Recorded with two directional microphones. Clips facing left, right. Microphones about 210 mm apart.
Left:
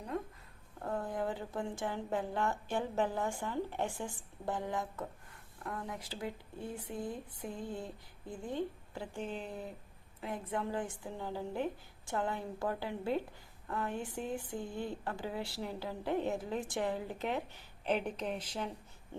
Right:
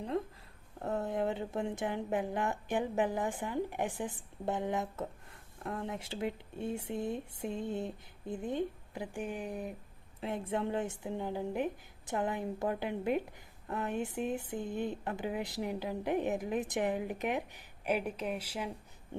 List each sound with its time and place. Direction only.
0.8 s a woman's voice: 25° right (ahead or behind)
10.2 s a woman's voice: 25° right (ahead or behind); by 18.7 s 10° right (ahead or behind)